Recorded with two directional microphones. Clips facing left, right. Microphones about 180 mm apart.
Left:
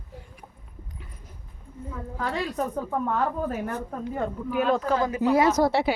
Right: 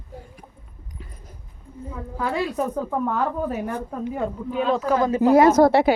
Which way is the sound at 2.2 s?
10° right (ahead or behind).